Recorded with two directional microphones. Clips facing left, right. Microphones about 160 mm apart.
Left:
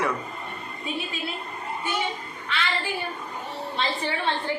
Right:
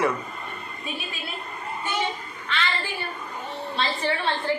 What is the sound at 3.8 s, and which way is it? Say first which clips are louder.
Speech: even; 15° left (ahead or behind).